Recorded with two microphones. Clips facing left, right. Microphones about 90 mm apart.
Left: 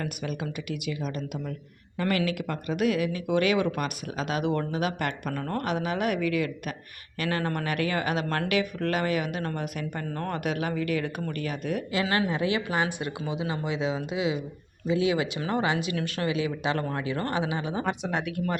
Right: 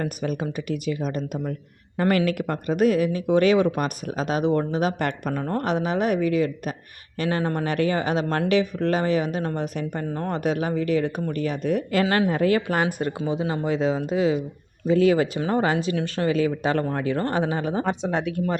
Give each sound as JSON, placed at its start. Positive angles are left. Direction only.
{"t": 0.0, "sound": "speech", "side_deg": -40}
{"t": 11.9, "sound": "speech", "side_deg": -50}
{"t": 17.8, "sound": "speech", "side_deg": -30}